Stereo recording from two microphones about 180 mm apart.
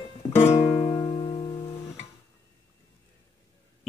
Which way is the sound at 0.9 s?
25° left (ahead or behind).